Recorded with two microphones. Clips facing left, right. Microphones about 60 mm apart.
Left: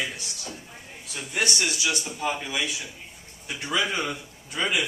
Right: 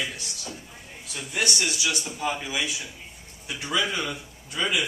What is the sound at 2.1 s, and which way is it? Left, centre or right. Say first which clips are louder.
Speech: even; centre.